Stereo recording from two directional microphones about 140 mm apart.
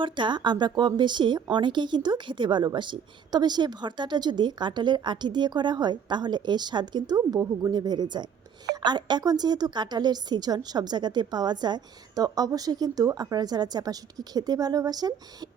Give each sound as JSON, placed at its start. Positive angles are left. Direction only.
{"t": 0.0, "sound": "a woman's voice", "side_deg": -35}